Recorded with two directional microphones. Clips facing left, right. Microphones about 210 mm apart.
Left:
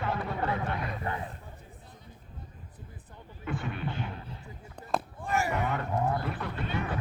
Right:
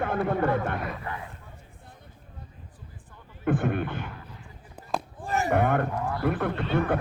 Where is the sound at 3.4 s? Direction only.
55° right (ahead or behind).